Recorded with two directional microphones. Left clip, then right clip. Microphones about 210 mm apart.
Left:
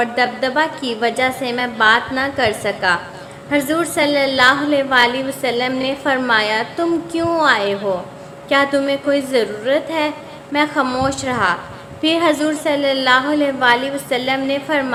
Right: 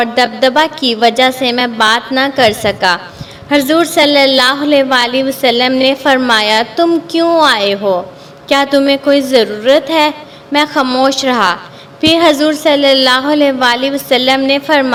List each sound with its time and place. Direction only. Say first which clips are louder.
0.0 s a woman's voice: right 7 dB; 40° right (ahead or behind)